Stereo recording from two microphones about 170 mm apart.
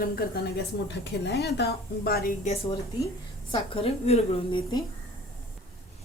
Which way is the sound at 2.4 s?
35° left (ahead or behind).